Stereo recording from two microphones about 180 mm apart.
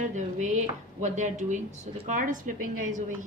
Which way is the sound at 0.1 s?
40° right (ahead or behind).